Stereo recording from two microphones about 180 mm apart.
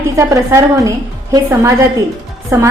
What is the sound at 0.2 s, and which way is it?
A woman's voice, 20° right (ahead or behind).